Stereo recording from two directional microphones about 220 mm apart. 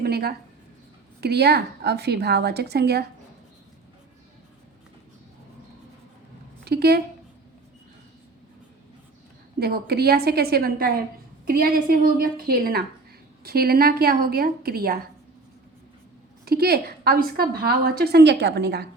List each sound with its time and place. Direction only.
0.0 s a sound: 45° right (ahead or behind)
1.2 s a woman's voice: 45° right (ahead or behind)
6.7 s a woman's voice: 45° right (ahead or behind)
9.6 s a woman's voice: 45° right (ahead or behind)
16.5 s a woman's voice: 45° right (ahead or behind)